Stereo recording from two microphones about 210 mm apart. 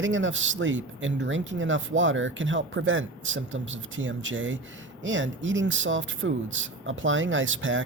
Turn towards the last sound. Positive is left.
turn(degrees=-65)  # may be behind; listen again after turning